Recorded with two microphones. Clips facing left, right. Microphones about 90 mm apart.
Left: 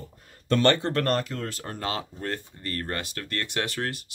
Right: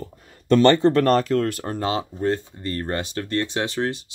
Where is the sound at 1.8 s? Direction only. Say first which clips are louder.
Right 8 dB; 20° right (ahead or behind).